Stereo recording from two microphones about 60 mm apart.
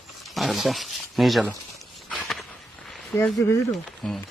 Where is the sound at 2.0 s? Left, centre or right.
Centre.